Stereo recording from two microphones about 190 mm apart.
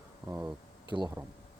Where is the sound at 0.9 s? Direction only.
25° right (ahead or behind).